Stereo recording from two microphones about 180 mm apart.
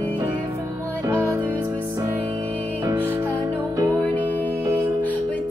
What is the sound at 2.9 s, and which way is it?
Music, 10° right (ahead or behind).